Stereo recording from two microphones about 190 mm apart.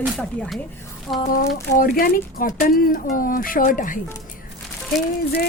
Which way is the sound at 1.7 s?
50° left (ahead or behind).